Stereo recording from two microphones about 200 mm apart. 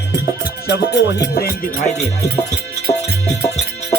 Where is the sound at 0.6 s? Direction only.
55° left (ahead or behind).